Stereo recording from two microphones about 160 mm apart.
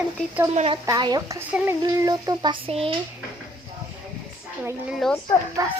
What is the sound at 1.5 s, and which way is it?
Speech, 10° right (ahead or behind).